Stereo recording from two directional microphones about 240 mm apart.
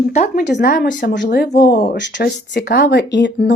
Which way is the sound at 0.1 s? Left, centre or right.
Left.